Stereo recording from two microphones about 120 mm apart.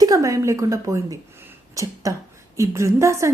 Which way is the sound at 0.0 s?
30° right (ahead or behind).